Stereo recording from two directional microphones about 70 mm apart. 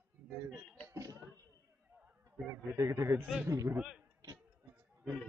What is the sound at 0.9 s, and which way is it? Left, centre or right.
Speech, right.